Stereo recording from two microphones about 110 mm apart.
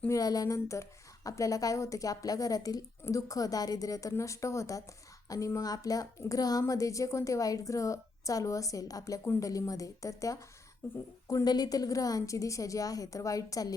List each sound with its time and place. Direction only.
0.1 s a woman's voice: 35° left (ahead or behind)